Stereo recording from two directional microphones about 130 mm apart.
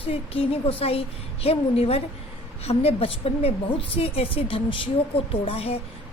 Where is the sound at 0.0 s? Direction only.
45° left (ahead or behind).